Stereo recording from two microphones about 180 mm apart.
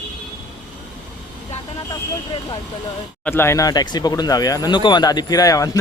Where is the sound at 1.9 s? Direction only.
25° left (ahead or behind).